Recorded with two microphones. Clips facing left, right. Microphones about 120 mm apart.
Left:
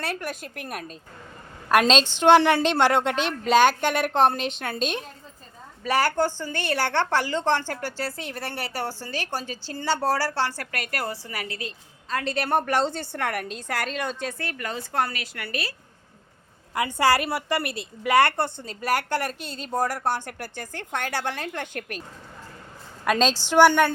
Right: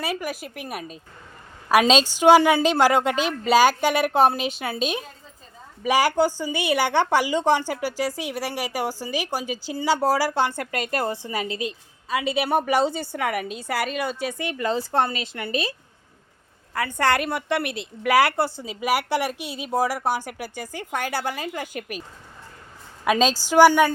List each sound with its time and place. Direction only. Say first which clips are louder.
0.0 s a woman's voice: right 3 dB; 5° right (ahead or behind); by 11.7 s 20° right (ahead or behind)
12.0 s a woman's voice: right 3 dB; 10° right (ahead or behind)
14.6 s a woman's voice: right 5 dB; 30° right (ahead or behind)
16.7 s a woman's voice: left 1 dB; 15° left (ahead or behind)
17.1 s a woman's voice: even; 5° left (ahead or behind)
23.0 s a woman's voice: right 2 dB; 5° right (ahead or behind)